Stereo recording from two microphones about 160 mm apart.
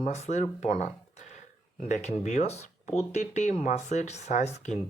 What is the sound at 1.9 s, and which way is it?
Speech, 45° left (ahead or behind).